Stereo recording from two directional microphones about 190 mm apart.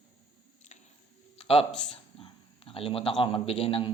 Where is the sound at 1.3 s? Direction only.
30° left (ahead or behind).